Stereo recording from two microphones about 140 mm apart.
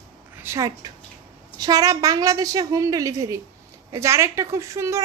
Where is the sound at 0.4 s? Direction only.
20° right (ahead or behind).